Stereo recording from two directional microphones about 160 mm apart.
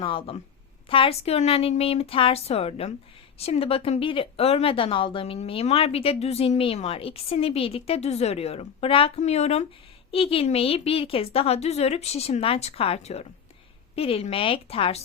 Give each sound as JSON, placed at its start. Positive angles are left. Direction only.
{"t": 0.0, "sound": "speech", "side_deg": 35}